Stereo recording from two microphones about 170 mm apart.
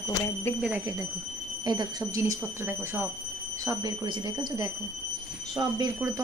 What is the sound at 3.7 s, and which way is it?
Speech, 25° right (ahead or behind).